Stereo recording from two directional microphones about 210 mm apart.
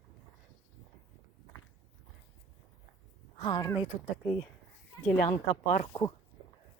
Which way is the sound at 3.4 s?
20° left (ahead or behind).